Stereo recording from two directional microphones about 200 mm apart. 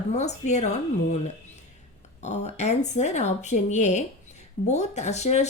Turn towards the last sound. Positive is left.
turn(degrees=35)  # may be behind; listen again after turning